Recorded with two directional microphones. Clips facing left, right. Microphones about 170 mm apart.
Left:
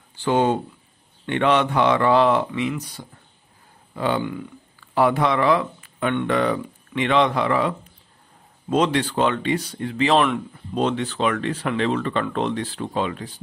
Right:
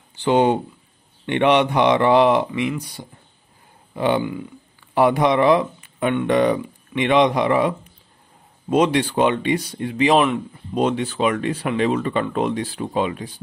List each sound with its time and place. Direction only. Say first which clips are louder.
0.2 s speech: right 3 dB; 15° right (ahead or behind)
3.9 s speech: right 3 dB; 20° right (ahead or behind)
10.1 s a man's voice: right 1 dB; centre (ahead or behind)
10.7 s speech: right 2 dB; 10° right (ahead or behind)